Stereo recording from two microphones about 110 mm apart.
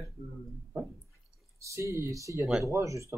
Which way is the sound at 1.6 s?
30° right (ahead or behind).